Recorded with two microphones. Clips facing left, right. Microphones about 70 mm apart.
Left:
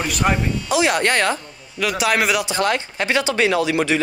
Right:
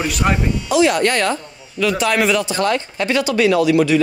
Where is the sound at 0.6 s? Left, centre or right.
Left.